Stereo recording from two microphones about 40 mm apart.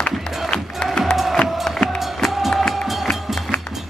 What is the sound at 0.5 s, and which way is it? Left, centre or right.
Music, centre.